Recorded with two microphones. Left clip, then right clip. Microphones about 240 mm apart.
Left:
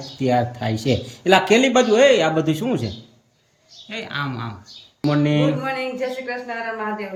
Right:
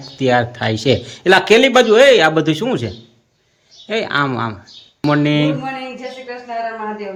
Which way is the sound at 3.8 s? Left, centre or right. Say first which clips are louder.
Right 10 dB; centre.